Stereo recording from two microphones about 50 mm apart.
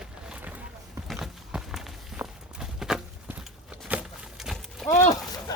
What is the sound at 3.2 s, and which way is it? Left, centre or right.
Walk, right.